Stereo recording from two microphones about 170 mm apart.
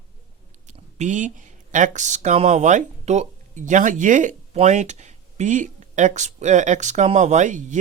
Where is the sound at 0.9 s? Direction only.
45° right (ahead or behind).